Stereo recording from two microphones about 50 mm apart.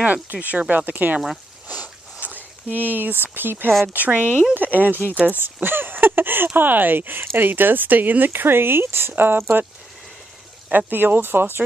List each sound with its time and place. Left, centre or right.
0.0 s speech: right
1.7 s a sound: right
3.8 s speech: right
5.4 s speech: right
8.3 s speech: right
10.9 s speech: right